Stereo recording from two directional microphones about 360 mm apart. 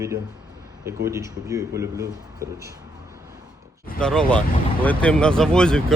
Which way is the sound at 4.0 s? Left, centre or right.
Centre.